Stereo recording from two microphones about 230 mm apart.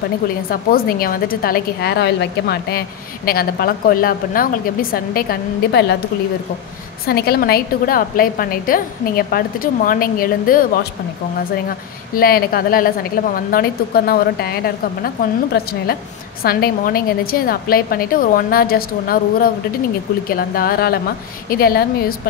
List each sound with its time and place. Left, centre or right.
0.5 s a woman's voice: left
7.1 s a woman's voice: left
12.2 s a woman's voice: left